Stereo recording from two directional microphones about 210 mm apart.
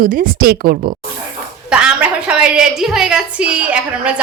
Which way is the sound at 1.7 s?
5° right (ahead or behind).